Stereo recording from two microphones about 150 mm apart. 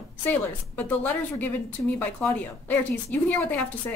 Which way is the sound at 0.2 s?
10° left (ahead or behind).